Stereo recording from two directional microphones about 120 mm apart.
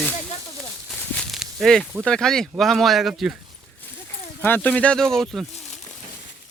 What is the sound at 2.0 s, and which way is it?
Speech, 5° left (ahead or behind).